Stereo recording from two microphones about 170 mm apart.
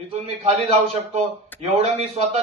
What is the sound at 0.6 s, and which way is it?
A man's voice, 40° right (ahead or behind).